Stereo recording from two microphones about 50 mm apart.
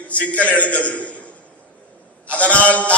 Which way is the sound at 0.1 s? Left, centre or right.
Left.